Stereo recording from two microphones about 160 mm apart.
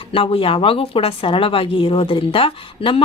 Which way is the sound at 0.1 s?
35° left (ahead or behind).